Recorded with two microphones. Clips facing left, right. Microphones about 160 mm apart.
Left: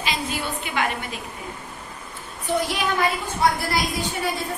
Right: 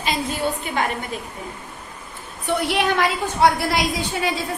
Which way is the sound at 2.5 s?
65° right (ahead or behind).